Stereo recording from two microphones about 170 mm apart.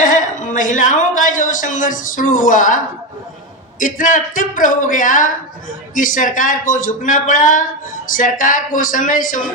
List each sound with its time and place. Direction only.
0.0 s a woman's voice: 50° left (ahead or behind)